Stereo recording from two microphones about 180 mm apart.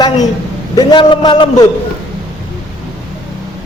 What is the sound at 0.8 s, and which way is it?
Speech, 25° left (ahead or behind).